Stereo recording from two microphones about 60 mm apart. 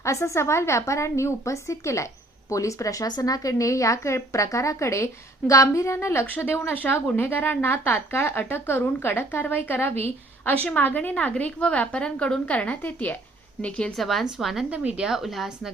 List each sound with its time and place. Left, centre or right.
0.0 s a woman's voice: left
6.2 s a woman's voice: left
13.6 s a woman's voice: centre
13.9 s a woman's voice: centre
14.7 s speech: centre